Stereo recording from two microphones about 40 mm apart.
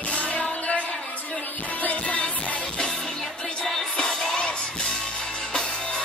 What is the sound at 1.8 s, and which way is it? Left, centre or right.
Music, left.